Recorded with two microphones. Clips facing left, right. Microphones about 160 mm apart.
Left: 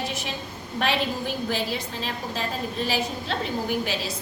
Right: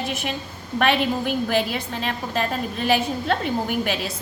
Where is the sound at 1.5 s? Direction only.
60° right (ahead or behind).